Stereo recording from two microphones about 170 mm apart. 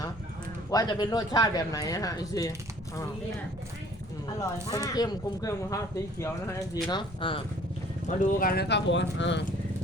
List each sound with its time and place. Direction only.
0.7 s speech: 25° left (ahead or behind)
4.4 s speech: 20° left (ahead or behind)
6.8 s speech: 30° left (ahead or behind)
8.0 s speech: 50° left (ahead or behind); by 9.4 s 90° left